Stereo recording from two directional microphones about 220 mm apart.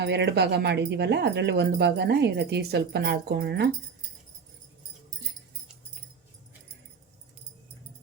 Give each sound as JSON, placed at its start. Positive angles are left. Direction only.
{"t": 0.0, "sound": "speech", "side_deg": -50}